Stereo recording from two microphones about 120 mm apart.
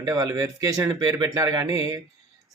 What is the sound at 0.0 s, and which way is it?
Speech, 30° right (ahead or behind).